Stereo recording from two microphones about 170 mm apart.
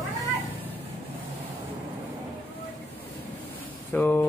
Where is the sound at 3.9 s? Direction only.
10° left (ahead or behind).